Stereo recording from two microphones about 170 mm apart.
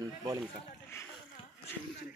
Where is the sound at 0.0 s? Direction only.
25° right (ahead or behind).